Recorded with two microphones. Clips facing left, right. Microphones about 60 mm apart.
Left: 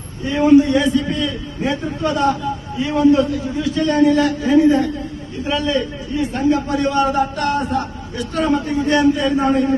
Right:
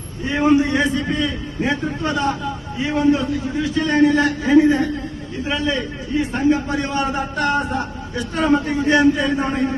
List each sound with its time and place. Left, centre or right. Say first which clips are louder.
0.3 s a man's voice: left 4 dB; right